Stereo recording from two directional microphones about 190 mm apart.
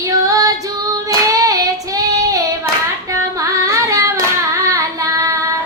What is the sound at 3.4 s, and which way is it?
Carnatic music, 15° right (ahead or behind).